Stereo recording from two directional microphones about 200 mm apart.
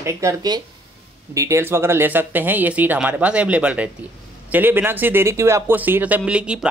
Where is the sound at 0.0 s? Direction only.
15° right (ahead or behind).